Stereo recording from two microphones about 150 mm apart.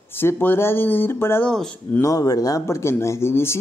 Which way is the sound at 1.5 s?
5° left (ahead or behind).